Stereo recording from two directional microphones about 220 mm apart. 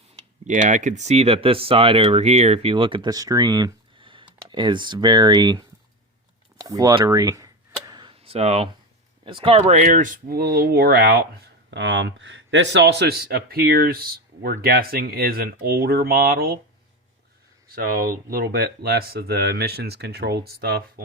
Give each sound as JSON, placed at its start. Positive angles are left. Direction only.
{"t": 0.4, "sound": "speech", "side_deg": -35}
{"t": 6.6, "sound": "tick-tock", "side_deg": -15}
{"t": 9.2, "sound": "speech", "side_deg": -25}
{"t": 17.7, "sound": "speech", "side_deg": -40}